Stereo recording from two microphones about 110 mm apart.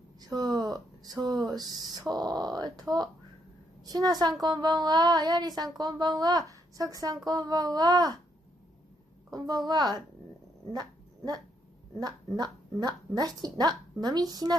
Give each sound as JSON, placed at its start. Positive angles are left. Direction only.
{"t": 0.2, "sound": "a woman's voice", "side_deg": -35}
{"t": 9.3, "sound": "a woman's voice", "side_deg": -35}
{"t": 10.7, "sound": "dog", "side_deg": -35}
{"t": 12.0, "sound": "a woman's voice", "side_deg": -35}